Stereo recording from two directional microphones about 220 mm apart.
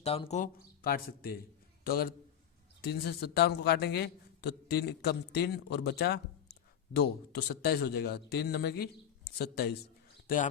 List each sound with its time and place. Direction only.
0.0 s a man's voice: 25° left (ahead or behind)